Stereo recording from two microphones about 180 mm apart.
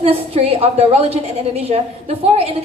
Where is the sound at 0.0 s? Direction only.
35° right (ahead or behind).